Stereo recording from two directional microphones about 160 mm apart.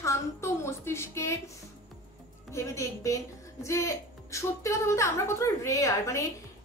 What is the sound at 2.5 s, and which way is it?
A woman's voice, 20° left (ahead or behind).